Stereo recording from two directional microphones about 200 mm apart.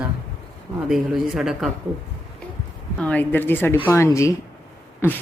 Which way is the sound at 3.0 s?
5° left (ahead or behind).